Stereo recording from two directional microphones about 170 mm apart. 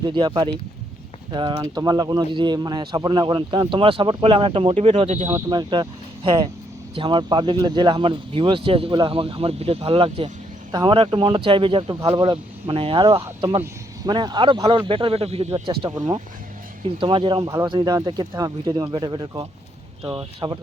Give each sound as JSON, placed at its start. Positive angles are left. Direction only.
{"t": 0.0, "sound": "a man's voice", "side_deg": -25}
{"t": 5.3, "sound": "a man's voice", "side_deg": -25}